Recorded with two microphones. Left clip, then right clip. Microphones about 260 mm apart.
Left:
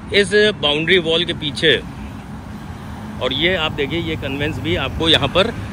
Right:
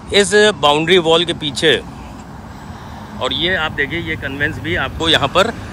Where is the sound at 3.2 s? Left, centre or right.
Centre.